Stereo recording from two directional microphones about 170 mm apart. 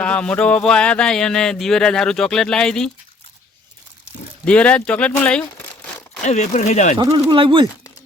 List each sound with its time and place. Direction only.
0.0 s speech: 5° left (ahead or behind)
4.4 s speech: 5° left (ahead or behind)
6.2 s speech: 45° left (ahead or behind)
7.0 s speech: 30° right (ahead or behind)